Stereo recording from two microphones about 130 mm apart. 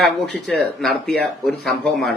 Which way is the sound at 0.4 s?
5° left (ahead or behind).